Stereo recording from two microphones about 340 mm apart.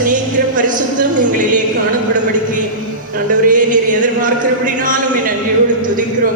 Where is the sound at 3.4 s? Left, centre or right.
Right.